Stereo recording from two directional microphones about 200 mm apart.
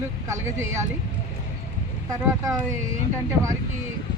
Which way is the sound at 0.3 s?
15° right (ahead or behind).